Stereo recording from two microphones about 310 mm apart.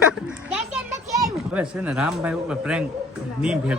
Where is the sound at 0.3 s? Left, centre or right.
Centre.